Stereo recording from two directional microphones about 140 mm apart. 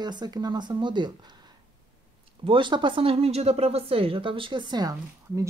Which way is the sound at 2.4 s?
35° right (ahead or behind).